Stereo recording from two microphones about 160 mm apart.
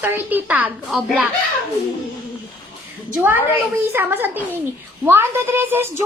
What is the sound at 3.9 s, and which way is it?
A woman's voice, 15° right (ahead or behind).